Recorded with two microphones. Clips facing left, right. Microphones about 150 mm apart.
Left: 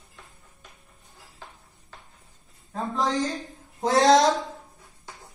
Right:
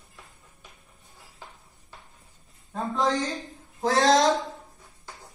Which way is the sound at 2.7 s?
Centre (ahead or behind).